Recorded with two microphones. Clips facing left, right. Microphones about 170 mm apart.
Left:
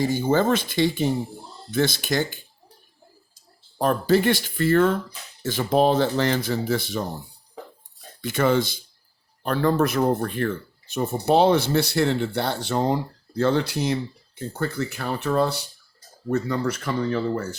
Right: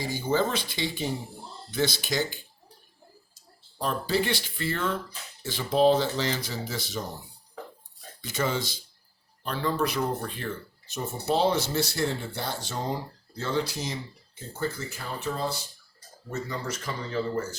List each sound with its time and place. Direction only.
0.0 s speech: 50° left (ahead or behind)
3.8 s speech: 50° left (ahead or behind)
8.2 s speech: 60° left (ahead or behind)